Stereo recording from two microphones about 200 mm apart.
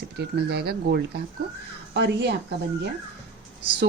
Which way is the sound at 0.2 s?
55° right (ahead or behind).